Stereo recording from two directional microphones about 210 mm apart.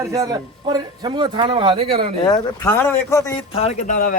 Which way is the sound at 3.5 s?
30° left (ahead or behind).